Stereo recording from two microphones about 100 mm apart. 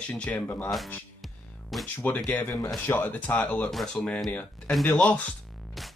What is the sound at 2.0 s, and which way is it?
Speech, 15° left (ahead or behind).